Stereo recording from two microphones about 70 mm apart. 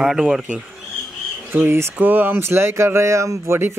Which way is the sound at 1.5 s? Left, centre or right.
Right.